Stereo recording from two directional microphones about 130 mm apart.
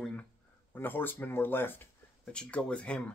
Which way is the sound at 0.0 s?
10° left (ahead or behind).